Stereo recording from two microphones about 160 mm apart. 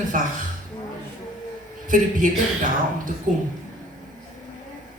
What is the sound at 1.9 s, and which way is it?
Speech, 55° right (ahead or behind).